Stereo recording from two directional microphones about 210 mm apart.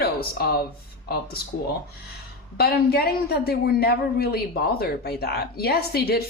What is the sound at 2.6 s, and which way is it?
A woman's voice, 50° left (ahead or behind).